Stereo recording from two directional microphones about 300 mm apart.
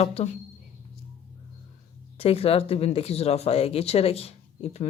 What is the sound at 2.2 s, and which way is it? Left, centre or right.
Speech, centre.